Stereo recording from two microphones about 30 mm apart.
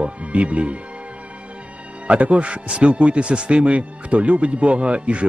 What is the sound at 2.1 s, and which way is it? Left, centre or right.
Speech, right.